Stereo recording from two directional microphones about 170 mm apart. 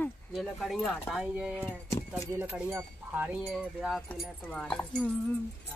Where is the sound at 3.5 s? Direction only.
Centre (ahead or behind).